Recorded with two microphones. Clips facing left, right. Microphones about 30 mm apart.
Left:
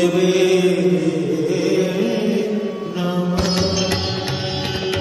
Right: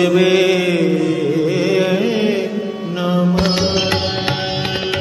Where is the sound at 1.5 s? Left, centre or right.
Right.